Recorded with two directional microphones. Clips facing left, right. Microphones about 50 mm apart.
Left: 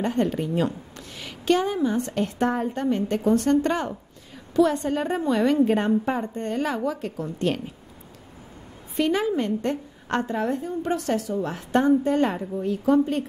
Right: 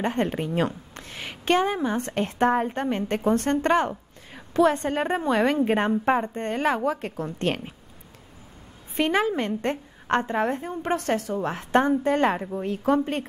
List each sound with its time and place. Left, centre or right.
0.0 s a woman's voice: right
8.9 s a woman's voice: right